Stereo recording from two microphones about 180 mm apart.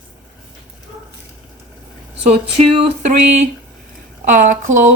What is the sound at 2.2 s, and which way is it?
Speech, 35° right (ahead or behind).